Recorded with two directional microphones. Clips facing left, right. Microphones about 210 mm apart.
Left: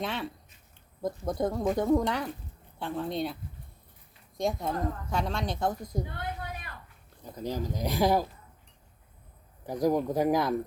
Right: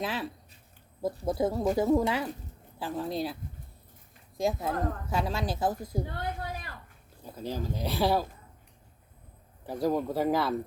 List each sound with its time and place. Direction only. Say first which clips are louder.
0.0 s a woman's voice: even; centre (ahead or behind)
4.4 s a woman's voice: right 1 dB; 5° right (ahead or behind)
6.4 s a sound: right 2 dB; 40° right (ahead or behind)
7.3 s speech: left 1 dB; 15° left (ahead or behind)
9.6 s speech: left 2 dB; 15° left (ahead or behind)